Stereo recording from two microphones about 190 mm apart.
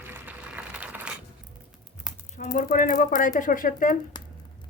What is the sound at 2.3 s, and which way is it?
Speech, 40° left (ahead or behind).